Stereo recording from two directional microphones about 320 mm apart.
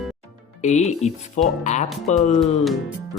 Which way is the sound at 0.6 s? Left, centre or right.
Left.